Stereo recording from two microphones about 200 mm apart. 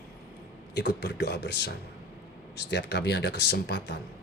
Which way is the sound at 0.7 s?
55° left (ahead or behind).